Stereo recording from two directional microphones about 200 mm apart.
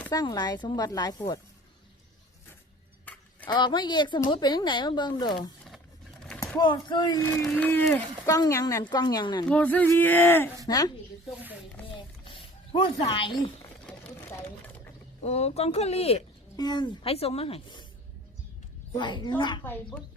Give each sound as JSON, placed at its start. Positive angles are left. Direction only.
{"t": 0.1, "sound": "speech", "side_deg": 20}
{"t": 3.5, "sound": "speech", "side_deg": 25}
{"t": 6.6, "sound": "speech", "side_deg": 20}
{"t": 7.4, "sound": "speech", "side_deg": 5}
{"t": 9.5, "sound": "speech", "side_deg": 10}
{"t": 12.3, "sound": "speech", "side_deg": 25}
{"t": 15.2, "sound": "speech", "side_deg": 35}
{"t": 18.9, "sound": "speech", "side_deg": 20}
{"t": 19.6, "sound": "speech", "side_deg": 10}